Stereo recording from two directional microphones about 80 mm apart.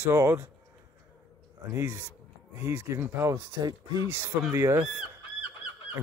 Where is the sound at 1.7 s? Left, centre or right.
Right.